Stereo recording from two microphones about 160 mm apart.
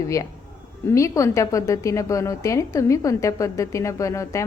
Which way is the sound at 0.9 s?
20° left (ahead or behind).